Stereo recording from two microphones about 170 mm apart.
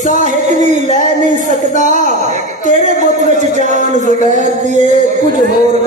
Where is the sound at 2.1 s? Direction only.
45° right (ahead or behind).